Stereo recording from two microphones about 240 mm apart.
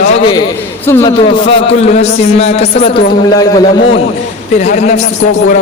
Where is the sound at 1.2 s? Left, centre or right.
Left.